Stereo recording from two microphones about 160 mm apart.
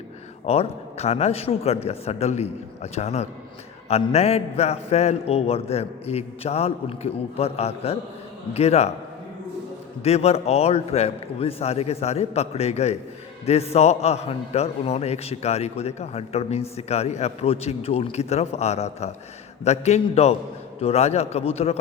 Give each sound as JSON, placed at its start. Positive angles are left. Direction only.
{"t": 0.4, "sound": "a man's voice", "side_deg": 40}
{"t": 10.0, "sound": "a man's voice", "side_deg": 40}